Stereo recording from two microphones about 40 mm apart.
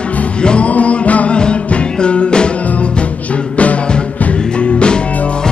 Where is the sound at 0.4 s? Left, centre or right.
Left.